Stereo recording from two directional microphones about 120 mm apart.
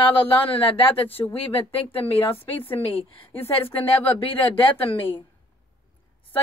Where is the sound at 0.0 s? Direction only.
45° left (ahead or behind).